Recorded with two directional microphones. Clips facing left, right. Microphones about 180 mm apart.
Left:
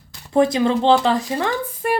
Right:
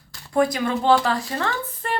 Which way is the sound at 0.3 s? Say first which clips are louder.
Left 4 dB; 25° left (ahead or behind).